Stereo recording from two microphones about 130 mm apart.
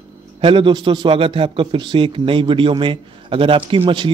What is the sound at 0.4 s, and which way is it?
A man's voice, 40° right (ahead or behind).